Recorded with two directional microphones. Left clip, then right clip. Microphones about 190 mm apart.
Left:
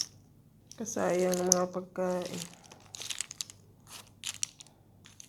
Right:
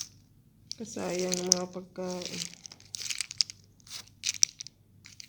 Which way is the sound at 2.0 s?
30° left (ahead or behind).